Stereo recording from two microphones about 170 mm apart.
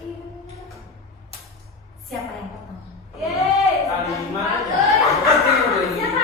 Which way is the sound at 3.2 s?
Centre (ahead or behind).